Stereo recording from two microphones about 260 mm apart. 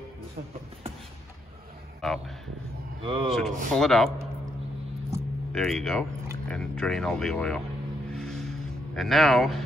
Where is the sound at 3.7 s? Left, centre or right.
Centre.